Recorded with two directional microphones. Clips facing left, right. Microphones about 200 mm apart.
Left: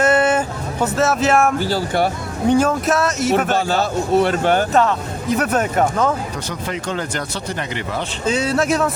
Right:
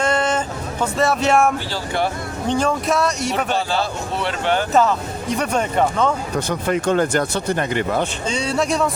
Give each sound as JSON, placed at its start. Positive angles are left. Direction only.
{"t": 0.0, "sound": "music", "side_deg": 5}
{"t": 1.7, "sound": "a man's voice", "side_deg": 45}
{"t": 2.5, "sound": "speech", "side_deg": 5}
{"t": 3.3, "sound": "a man's voice", "side_deg": 45}
{"t": 4.7, "sound": "speech", "side_deg": 0}
{"t": 6.5, "sound": "speech", "side_deg": -50}
{"t": 8.3, "sound": "speech", "side_deg": 5}